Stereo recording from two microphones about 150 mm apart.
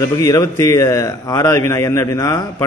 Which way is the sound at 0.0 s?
20° left (ahead or behind).